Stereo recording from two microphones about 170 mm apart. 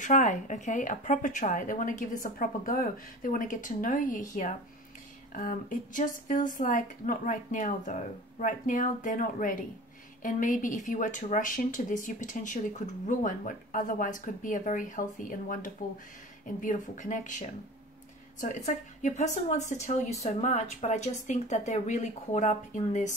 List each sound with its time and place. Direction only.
0.0 s speech: 45° left (ahead or behind)
5.3 s speech: 50° left (ahead or behind)